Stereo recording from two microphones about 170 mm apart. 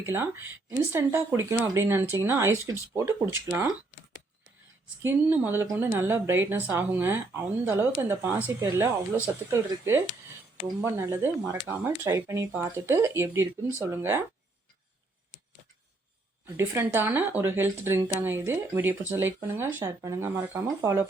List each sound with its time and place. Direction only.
0.0 s speech: 15° right (ahead or behind)
5.0 s speech: 15° right (ahead or behind)
16.6 s speech: 15° right (ahead or behind)